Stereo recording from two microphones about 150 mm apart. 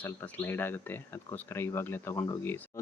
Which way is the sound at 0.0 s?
15° left (ahead or behind).